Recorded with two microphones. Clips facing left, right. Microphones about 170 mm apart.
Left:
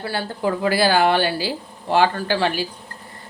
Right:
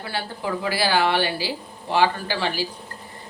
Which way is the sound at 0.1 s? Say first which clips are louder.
Left 4 dB; 50° left (ahead or behind).